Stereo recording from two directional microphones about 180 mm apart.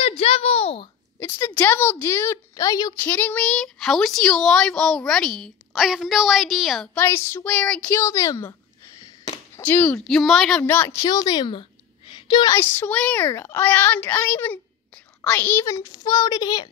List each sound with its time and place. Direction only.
0.0 s a sound: 35° left (ahead or behind)
1.2 s a woman's voice: 10° left (ahead or behind)
7.0 s a woman's voice: 15° left (ahead or behind)
9.6 s a woman's voice: 10° left (ahead or behind)
12.1 s a sound: 25° left (ahead or behind)
12.5 s a woman's voice: 10° left (ahead or behind)